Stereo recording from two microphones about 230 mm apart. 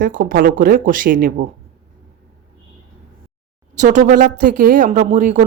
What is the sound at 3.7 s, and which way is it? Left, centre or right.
Speech, right.